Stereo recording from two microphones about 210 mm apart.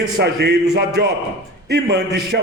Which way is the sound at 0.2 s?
50° right (ahead or behind).